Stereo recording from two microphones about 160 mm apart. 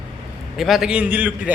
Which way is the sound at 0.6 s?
5° right (ahead or behind).